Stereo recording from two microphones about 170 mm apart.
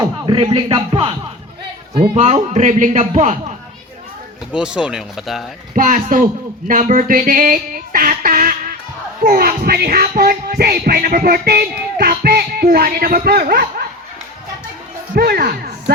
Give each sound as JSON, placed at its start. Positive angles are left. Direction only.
{"t": 0.0, "sound": "speech", "side_deg": -25}
{"t": 2.0, "sound": "duck", "side_deg": -40}
{"t": 4.5, "sound": "speech", "side_deg": -5}
{"t": 5.7, "sound": "duck", "side_deg": -50}
{"t": 9.2, "sound": "music", "side_deg": -60}
{"t": 15.1, "sound": "music", "side_deg": -60}